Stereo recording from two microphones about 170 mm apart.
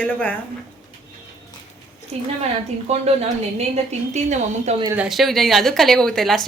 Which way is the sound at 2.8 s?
40° right (ahead or behind).